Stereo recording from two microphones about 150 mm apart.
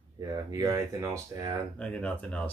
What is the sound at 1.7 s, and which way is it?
Speech, 10° left (ahead or behind).